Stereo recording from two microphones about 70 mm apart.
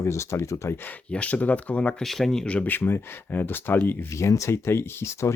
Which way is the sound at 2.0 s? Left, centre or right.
Centre.